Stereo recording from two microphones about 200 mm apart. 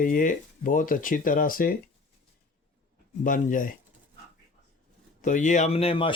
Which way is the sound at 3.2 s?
40° left (ahead or behind).